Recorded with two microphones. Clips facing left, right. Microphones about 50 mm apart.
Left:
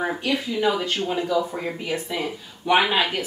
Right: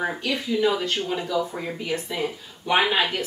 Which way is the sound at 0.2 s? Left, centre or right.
Centre.